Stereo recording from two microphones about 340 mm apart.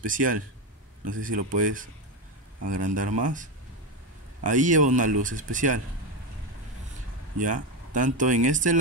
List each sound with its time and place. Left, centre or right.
0.0 s speech: right
7.3 s speech: right